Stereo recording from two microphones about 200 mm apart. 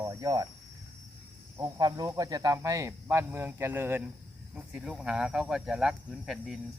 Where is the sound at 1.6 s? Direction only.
20° right (ahead or behind).